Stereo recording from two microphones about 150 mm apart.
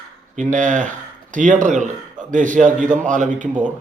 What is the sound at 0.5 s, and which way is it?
A man's voice, 55° right (ahead or behind).